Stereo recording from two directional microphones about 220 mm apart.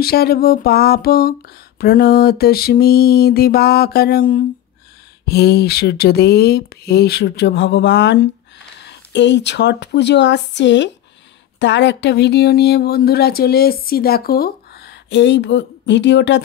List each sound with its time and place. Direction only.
0.0 s speech: 45° left (ahead or behind)